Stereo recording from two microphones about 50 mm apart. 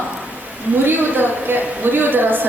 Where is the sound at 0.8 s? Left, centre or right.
Right.